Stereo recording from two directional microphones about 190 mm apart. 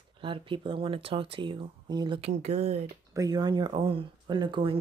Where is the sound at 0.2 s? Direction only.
25° right (ahead or behind).